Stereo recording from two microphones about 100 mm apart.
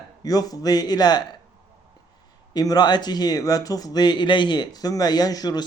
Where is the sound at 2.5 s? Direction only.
40° left (ahead or behind).